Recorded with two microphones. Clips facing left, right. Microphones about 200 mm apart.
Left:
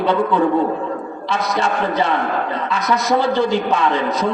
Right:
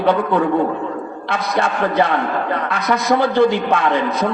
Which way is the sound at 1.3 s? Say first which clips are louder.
Even; 55° right (ahead or behind).